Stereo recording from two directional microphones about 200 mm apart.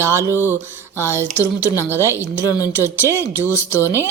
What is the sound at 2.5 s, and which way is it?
Speech, 15° left (ahead or behind).